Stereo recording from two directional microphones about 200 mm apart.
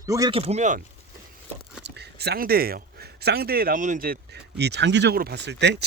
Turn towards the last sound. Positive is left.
turn(degrees=-60)  # may be behind; listen again after turning